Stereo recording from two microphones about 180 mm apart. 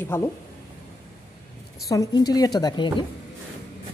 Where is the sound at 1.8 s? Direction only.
20° left (ahead or behind).